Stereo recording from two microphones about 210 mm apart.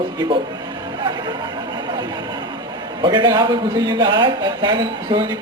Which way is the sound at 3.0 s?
20° right (ahead or behind).